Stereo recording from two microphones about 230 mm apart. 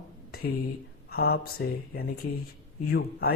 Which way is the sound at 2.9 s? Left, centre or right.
Left.